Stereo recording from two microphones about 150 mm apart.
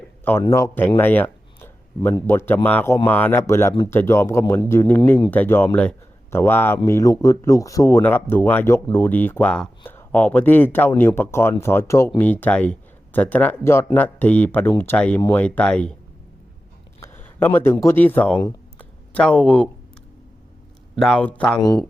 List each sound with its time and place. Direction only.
0.5 s a man's voice: 15° left (ahead or behind)
17.0 s speech: 15° left (ahead or behind)
18.8 s a sound: 10° left (ahead or behind)
20.9 s speech: centre (ahead or behind)